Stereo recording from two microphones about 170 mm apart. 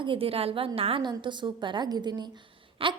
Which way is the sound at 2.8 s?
30° right (ahead or behind).